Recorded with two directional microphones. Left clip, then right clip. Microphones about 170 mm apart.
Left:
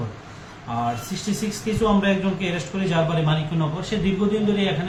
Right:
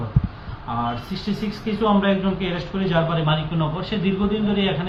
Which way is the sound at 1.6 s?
20° left (ahead or behind).